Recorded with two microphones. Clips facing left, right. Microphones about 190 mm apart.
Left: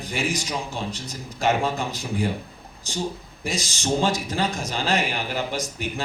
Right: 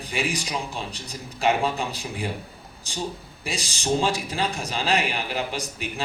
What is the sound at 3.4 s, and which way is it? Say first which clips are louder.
Speech: left 1 dB; 35° right (ahead or behind).